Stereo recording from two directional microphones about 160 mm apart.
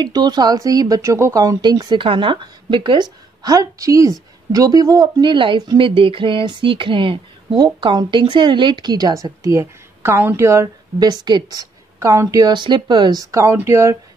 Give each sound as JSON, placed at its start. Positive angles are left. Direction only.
{"t": 0.0, "sound": "a woman's voice", "side_deg": -25}